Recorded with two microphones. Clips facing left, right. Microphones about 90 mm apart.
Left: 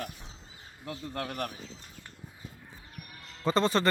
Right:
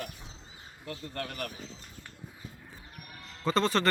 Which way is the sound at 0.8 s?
10° left (ahead or behind).